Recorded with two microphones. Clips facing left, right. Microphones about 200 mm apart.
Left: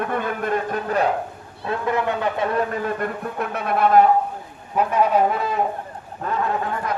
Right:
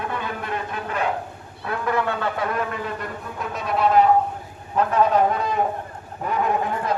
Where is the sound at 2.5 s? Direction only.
45° left (ahead or behind).